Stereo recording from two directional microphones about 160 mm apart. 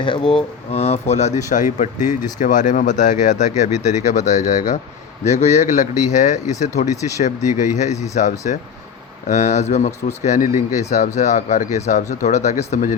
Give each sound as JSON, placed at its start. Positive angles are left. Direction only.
{"t": 0.0, "sound": "speech", "side_deg": 30}